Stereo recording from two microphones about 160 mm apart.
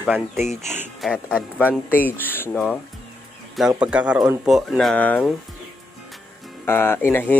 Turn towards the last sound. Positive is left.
turn(degrees=10)  # may be behind; listen again after turning